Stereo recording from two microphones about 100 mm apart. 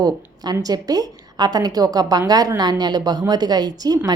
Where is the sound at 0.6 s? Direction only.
40° right (ahead or behind).